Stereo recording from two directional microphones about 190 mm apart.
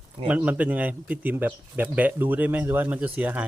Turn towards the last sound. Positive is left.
turn(degrees=-10)  # may be behind; listen again after turning